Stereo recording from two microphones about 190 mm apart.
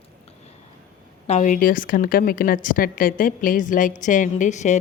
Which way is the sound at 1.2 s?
40° left (ahead or behind).